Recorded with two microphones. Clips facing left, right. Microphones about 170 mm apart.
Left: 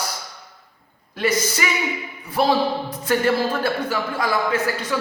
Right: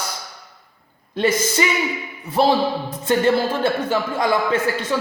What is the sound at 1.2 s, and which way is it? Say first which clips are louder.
Speech: right 3 dB; 25° right (ahead or behind).